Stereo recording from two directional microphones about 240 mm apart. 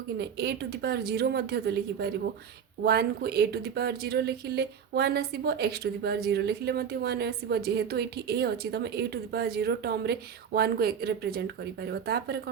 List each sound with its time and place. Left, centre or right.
0.2 s speech: right